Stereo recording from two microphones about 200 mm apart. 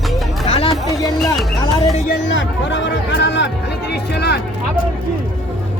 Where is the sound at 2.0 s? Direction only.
60° left (ahead or behind).